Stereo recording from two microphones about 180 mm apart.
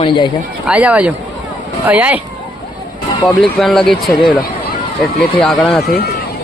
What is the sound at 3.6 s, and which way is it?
Speech, centre (ahead or behind).